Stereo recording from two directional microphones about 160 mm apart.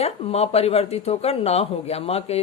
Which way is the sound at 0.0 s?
40° left (ahead or behind).